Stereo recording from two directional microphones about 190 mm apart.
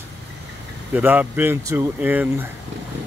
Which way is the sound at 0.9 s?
10° right (ahead or behind).